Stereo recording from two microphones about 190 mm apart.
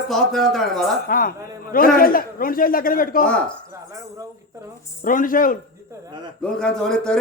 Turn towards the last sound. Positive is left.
turn(degrees=5)  # may be behind; listen again after turning